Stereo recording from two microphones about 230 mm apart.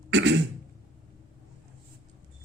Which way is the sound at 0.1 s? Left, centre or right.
Right.